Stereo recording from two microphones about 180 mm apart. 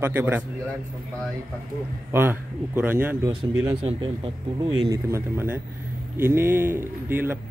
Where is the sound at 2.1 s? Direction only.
10° right (ahead or behind).